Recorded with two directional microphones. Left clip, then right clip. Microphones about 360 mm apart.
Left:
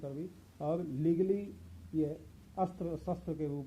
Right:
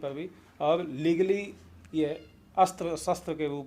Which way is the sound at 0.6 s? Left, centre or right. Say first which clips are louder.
Right 8 dB; centre.